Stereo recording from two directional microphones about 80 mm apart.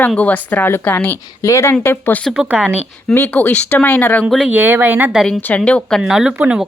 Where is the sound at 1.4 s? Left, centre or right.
Left.